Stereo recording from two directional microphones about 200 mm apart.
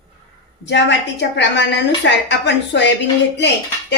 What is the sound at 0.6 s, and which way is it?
A woman's voice, 60° left (ahead or behind).